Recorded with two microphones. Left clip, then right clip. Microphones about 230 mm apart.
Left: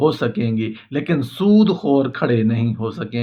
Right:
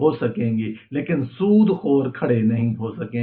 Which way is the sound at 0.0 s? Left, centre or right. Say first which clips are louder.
Left 2 dB; left.